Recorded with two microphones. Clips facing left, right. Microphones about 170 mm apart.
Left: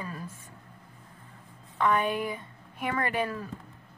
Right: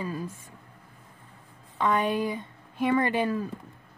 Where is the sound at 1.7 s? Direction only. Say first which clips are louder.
Right 1 dB; 20° right (ahead or behind).